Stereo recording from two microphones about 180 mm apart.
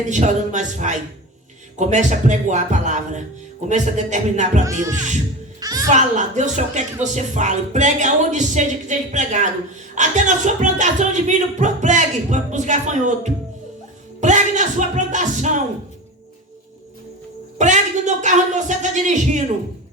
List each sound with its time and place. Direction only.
0.0 s music: 40° right (ahead or behind)
1.8 s speech: 40° right (ahead or behind)
3.7 s music: 40° right (ahead or behind)
5.5 s music: 20° right (ahead or behind)
5.9 s music: 40° right (ahead or behind)
9.9 s speech: 40° right (ahead or behind)
17.6 s music: 40° right (ahead or behind)